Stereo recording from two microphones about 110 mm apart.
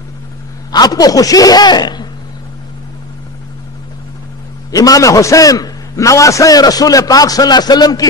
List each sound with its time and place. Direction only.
0.7 s a man's voice: 35° left (ahead or behind)
4.6 s a man's voice: 30° left (ahead or behind)